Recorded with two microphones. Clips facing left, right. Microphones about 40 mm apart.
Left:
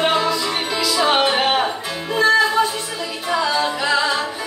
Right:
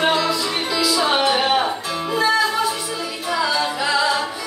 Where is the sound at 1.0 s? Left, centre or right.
Left.